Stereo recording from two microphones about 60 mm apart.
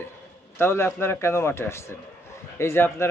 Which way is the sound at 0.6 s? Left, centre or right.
Left.